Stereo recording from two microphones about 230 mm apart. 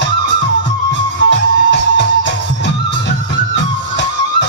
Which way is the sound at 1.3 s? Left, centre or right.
Left.